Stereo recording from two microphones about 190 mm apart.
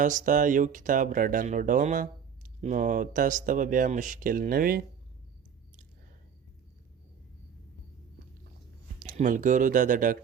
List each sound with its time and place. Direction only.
0.0 s speech: 40° right (ahead or behind)
9.0 s speech: 45° right (ahead or behind)